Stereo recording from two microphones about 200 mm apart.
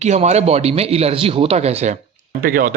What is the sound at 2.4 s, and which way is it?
Speech, 50° right (ahead or behind).